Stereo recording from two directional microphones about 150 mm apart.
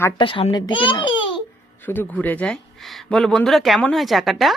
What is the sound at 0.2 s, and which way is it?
A child's voice, 35° left (ahead or behind).